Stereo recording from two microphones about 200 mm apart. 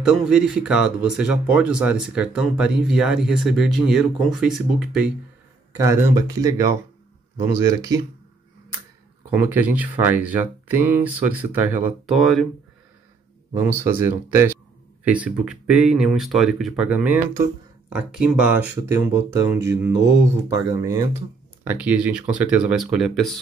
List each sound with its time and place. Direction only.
0.0 s speech: 5° right (ahead or behind)
5.8 s speech: 15° right (ahead or behind)
9.3 s speech: 10° right (ahead or behind)
13.9 s speech: 10° right (ahead or behind)
21.6 s speech: 5° right (ahead or behind)